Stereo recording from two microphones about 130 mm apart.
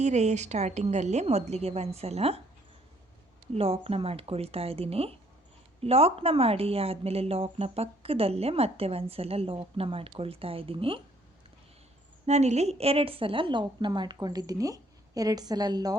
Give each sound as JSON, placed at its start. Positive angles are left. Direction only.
{"t": 0.0, "sound": "a woman's voice", "side_deg": -60}
{"t": 3.5, "sound": "speech", "side_deg": -50}
{"t": 12.2, "sound": "a woman's voice", "side_deg": -60}